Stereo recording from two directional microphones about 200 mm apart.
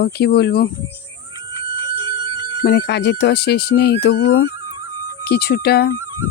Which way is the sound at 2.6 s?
55° left (ahead or behind).